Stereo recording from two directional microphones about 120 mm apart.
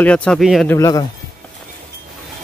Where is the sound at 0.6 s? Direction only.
25° left (ahead or behind).